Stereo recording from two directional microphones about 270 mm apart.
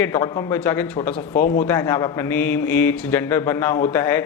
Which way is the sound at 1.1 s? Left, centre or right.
Left.